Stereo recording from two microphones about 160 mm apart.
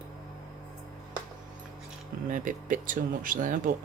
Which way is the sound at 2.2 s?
55° right (ahead or behind).